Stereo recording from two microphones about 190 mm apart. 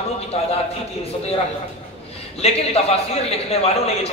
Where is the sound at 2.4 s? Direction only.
35° left (ahead or behind).